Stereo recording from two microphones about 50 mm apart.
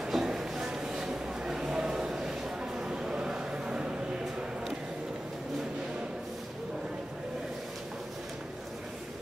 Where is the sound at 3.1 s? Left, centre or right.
Centre.